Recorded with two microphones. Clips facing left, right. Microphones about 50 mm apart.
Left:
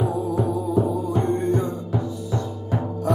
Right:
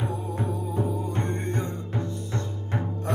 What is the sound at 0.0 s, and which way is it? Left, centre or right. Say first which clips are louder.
Music: left 7 dB; right.